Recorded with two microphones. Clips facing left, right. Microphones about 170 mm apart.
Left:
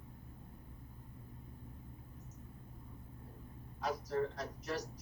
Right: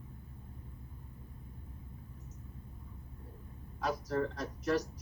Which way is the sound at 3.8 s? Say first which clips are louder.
Right 3 dB; 75° right (ahead or behind).